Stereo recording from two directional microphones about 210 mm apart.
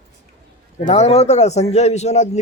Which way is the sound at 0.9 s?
30° left (ahead or behind).